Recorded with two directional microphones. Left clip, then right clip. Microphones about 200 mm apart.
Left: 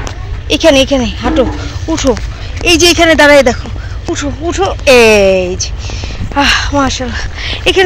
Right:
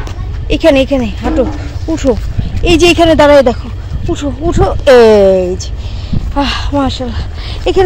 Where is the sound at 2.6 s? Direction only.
20° right (ahead or behind).